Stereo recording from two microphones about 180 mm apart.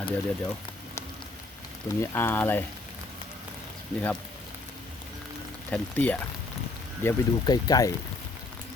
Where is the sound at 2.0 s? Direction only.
10° left (ahead or behind).